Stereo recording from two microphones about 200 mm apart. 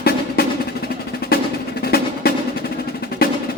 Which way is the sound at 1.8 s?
50° left (ahead or behind).